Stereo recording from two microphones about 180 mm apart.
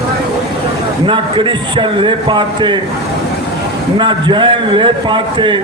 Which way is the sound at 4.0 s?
25° right (ahead or behind).